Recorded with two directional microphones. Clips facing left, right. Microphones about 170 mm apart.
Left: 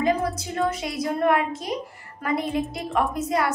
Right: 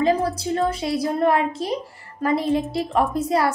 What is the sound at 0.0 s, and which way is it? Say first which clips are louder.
A woman's voice: right 3 dB; 35° right (ahead or behind).